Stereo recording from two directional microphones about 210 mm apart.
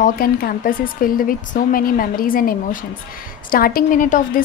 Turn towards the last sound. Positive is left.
turn(degrees=40)  # may be behind; listen again after turning